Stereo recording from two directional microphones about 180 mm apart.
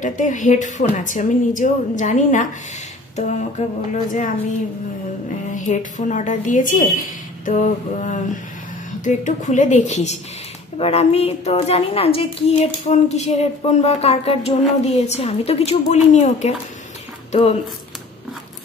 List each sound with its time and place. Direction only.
0.0 s a woman's voice: 45° left (ahead or behind)
5.5 s a woman's voice: 45° left (ahead or behind)